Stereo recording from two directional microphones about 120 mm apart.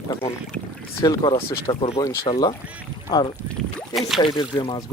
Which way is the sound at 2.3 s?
40° left (ahead or behind).